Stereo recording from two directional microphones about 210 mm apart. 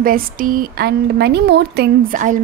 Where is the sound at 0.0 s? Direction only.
40° right (ahead or behind).